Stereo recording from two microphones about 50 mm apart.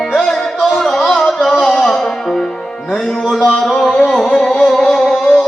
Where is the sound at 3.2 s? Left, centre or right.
Centre.